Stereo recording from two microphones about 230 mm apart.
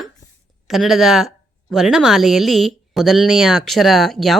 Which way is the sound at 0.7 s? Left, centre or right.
Centre.